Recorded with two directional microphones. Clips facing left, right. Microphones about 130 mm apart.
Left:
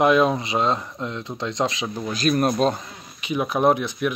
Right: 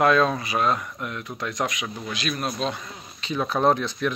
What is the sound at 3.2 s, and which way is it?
Speech, 15° left (ahead or behind).